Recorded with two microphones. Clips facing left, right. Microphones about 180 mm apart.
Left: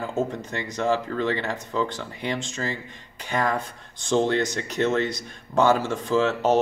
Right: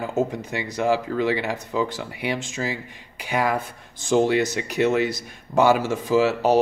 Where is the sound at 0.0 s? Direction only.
15° right (ahead or behind).